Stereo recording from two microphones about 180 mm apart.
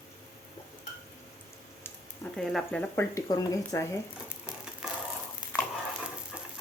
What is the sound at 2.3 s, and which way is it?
Speech, centre (ahead or behind).